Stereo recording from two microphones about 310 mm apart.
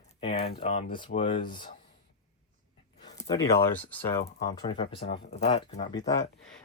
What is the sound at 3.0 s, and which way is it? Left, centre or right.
Speech, centre.